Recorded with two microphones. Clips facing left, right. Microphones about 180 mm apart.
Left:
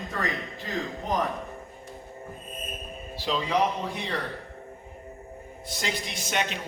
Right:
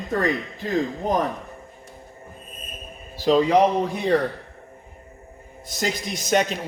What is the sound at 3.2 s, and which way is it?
Speech, 45° right (ahead or behind).